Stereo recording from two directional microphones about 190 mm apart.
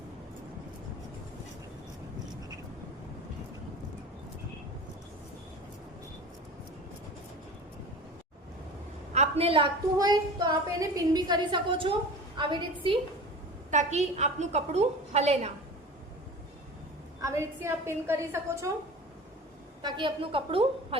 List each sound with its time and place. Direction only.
9.1 s a woman's voice: 35° right (ahead or behind)
13.7 s a woman's voice: 40° right (ahead or behind)
17.2 s a woman's voice: 15° right (ahead or behind)
19.8 s a woman's voice: 25° right (ahead or behind)